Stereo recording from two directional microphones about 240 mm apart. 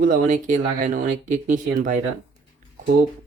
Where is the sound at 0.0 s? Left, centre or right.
Right.